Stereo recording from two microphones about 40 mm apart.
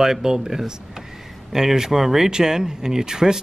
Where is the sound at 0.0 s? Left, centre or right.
Centre.